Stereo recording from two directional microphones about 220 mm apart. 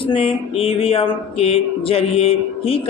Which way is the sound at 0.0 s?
25° left (ahead or behind).